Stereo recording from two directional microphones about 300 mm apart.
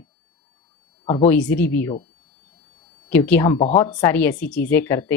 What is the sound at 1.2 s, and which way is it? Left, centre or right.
Speech, centre.